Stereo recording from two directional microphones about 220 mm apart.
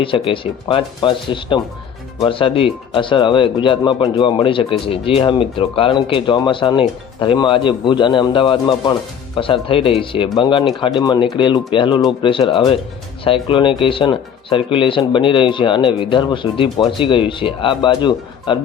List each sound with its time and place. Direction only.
0.0 s speech: 25° left (ahead or behind)